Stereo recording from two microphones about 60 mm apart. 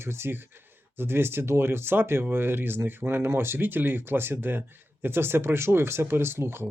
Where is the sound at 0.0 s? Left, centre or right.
Right.